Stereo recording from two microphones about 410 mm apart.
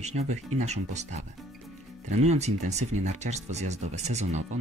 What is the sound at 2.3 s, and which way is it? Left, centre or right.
Speech, centre.